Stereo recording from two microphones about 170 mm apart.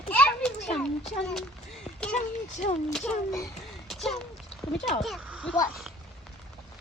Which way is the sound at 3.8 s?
Centre (ahead or behind).